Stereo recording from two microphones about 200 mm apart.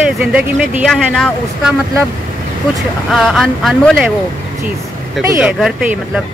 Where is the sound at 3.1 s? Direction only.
Centre (ahead or behind).